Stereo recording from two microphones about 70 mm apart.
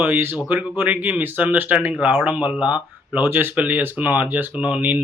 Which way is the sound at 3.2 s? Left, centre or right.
Right.